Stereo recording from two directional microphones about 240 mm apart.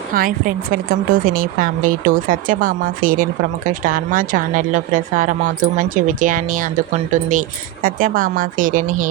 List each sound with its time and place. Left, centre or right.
0.1 s a woman's voice: right